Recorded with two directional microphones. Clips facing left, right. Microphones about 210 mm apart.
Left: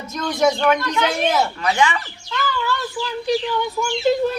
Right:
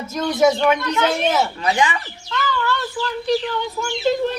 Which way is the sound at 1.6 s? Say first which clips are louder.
Even; 20° right (ahead or behind).